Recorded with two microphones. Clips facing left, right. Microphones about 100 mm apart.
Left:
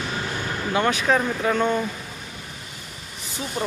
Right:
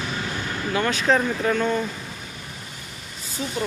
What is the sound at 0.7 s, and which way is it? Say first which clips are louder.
Speech: even; 25° left (ahead or behind).